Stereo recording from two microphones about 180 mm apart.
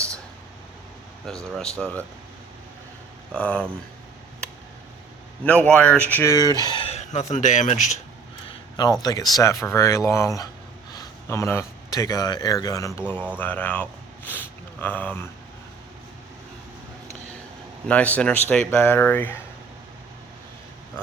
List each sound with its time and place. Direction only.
1.8 s speech: 5° left (ahead or behind)
3.3 s speech: 5° left (ahead or behind)
5.4 s speech: 5° left (ahead or behind); by 6.8 s 25° left (ahead or behind)
6.8 s speech: 40° left (ahead or behind)
8.4 s speech: 25° left (ahead or behind)
17.8 s speech: 10° left (ahead or behind)